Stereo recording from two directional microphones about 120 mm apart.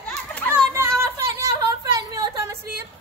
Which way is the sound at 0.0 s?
10° left (ahead or behind).